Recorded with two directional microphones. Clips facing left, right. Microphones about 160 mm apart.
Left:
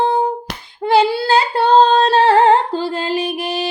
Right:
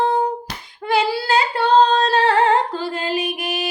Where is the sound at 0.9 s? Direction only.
30° left (ahead or behind).